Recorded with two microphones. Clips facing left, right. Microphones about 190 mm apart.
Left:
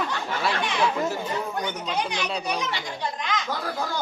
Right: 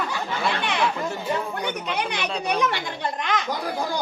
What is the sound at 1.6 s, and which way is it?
Speech, 60° right (ahead or behind).